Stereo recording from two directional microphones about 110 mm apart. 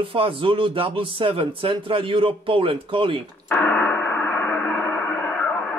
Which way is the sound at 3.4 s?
15° left (ahead or behind).